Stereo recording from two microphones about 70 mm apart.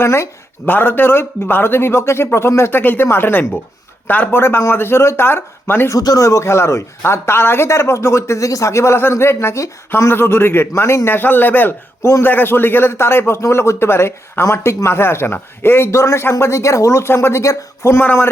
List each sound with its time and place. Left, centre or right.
0.0 s speech: left
5.9 s speech: left
6.2 s speech: left
18.0 s a man's voice: left